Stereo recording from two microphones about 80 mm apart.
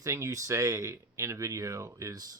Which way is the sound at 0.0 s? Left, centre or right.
Right.